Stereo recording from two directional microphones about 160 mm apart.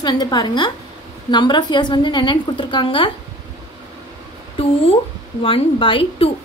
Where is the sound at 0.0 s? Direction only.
25° left (ahead or behind).